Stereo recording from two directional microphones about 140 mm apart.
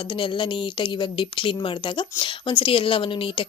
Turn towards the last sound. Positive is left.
turn(degrees=40)  # may be behind; listen again after turning